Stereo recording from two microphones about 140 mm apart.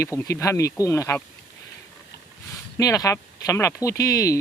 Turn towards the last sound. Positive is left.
turn(degrees=25)  # may be behind; listen again after turning